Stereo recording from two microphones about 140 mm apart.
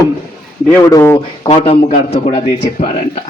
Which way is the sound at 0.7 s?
20° left (ahead or behind).